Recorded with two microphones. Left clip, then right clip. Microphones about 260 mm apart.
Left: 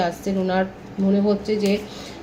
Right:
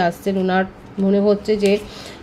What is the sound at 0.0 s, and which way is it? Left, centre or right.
Speech, right.